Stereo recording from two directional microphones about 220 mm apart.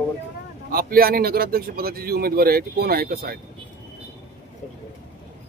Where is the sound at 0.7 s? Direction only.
40° right (ahead or behind).